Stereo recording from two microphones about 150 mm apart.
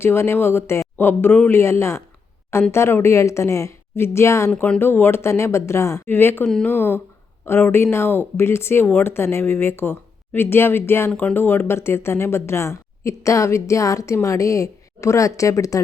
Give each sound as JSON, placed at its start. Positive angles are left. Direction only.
{"t": 0.0, "sound": "speech", "side_deg": 15}